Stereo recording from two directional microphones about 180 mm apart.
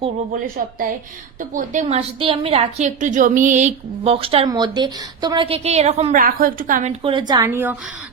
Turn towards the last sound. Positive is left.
turn(degrees=-10)  # may be behind; listen again after turning